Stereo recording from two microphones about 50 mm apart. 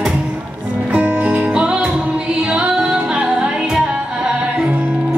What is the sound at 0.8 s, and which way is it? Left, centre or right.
Music, right.